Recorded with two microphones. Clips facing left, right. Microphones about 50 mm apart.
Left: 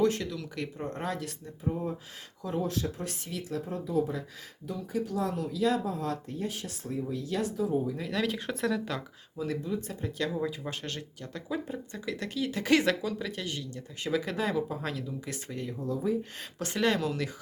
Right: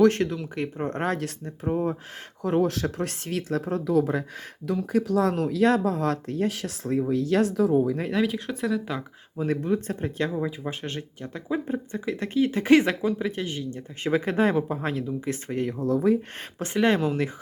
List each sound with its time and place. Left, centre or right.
0.3 s speech: right
0.9 s speech: right
2.6 s speech: right
4.1 s speech: right
8.2 s speech: centre
9.6 s speech: right
10.2 s speech: right
15.8 s speech: right
16.6 s speech: right